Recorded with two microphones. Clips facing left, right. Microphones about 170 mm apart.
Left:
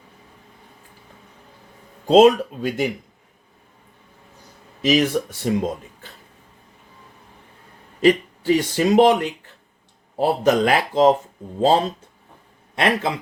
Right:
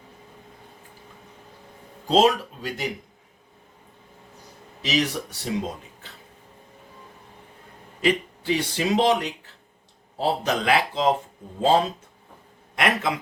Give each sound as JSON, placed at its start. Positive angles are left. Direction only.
{"t": 2.0, "sound": "speech", "side_deg": 55}
{"t": 4.8, "sound": "speech", "side_deg": 50}
{"t": 8.0, "sound": "speech", "side_deg": 45}
{"t": 12.7, "sound": "a man's voice", "side_deg": 30}